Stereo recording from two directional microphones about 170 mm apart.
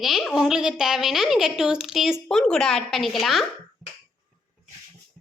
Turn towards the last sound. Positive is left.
turn(degrees=0)  # may be behind; listen again after turning